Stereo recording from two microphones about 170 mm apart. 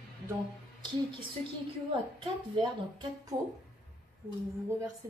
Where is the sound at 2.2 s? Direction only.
25° right (ahead or behind).